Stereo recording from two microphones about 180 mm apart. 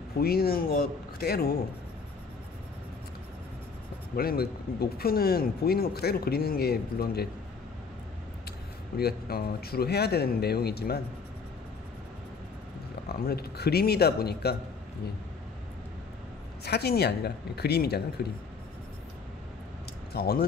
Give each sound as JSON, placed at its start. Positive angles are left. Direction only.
{"t": 0.2, "sound": "speech", "side_deg": 60}
{"t": 4.2, "sound": "speech", "side_deg": 60}
{"t": 8.9, "sound": "speech", "side_deg": 60}
{"t": 13.1, "sound": "speech", "side_deg": 60}
{"t": 16.6, "sound": "speech", "side_deg": 65}
{"t": 20.2, "sound": "speech", "side_deg": 60}